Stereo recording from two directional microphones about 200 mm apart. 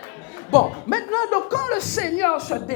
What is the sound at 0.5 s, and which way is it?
Speech, 10° left (ahead or behind).